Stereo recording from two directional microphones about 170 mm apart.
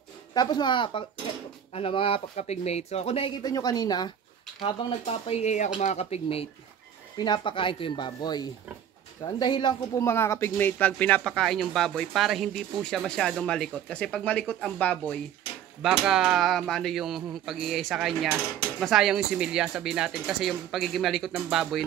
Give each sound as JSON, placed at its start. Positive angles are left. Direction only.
{"t": 0.3, "sound": "speech", "side_deg": 25}
{"t": 3.4, "sound": "speech", "side_deg": 20}
{"t": 10.0, "sound": "speech", "side_deg": 15}